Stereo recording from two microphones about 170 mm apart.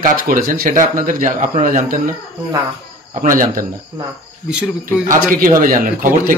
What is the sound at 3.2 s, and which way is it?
Speech, 50° right (ahead or behind).